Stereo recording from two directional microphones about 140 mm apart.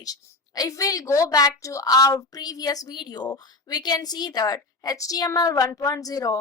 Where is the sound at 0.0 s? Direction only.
25° left (ahead or behind).